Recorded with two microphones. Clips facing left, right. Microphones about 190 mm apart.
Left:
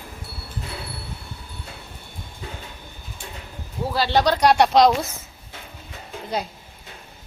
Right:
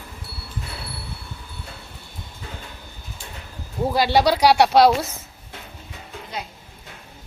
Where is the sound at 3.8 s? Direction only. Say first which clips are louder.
Right 2 dB; 15° right (ahead or behind).